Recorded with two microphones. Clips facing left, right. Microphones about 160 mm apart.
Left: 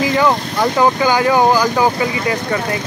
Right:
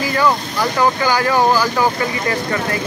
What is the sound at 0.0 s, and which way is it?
Speech, 20° left (ahead or behind).